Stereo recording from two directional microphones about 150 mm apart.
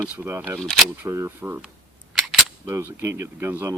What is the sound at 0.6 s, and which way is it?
Speech, 5° left (ahead or behind).